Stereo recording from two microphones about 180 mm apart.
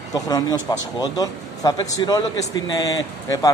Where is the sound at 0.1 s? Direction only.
20° left (ahead or behind).